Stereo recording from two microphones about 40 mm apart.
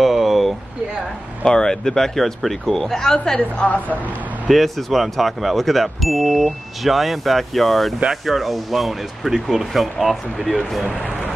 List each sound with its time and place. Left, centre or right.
0.0 s vehicle: centre
1.4 s speech: centre
3.3 s a woman's voice: left
4.5 s speech: centre